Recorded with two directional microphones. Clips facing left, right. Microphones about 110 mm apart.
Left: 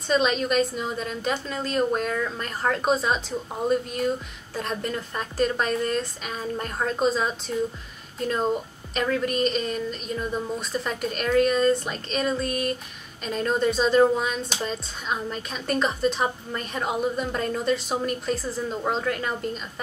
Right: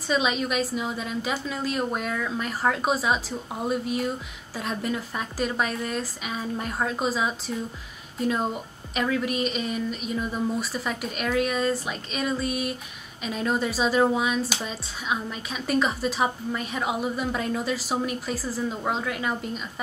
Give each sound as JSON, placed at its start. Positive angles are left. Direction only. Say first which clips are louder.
{"t": 0.1, "sound": "speech", "louder": "left 3 dB", "side_deg": -5}